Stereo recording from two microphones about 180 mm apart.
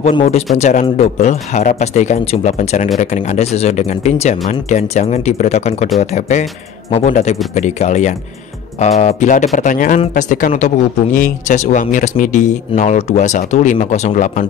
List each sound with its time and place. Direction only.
0.0 s speech: 35° left (ahead or behind)